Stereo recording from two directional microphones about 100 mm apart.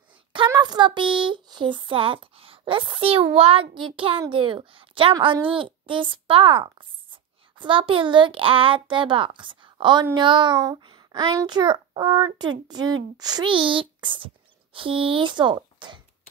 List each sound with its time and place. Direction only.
0.6 s speech: 50° right (ahead or behind)
13.7 s speech: 55° right (ahead or behind)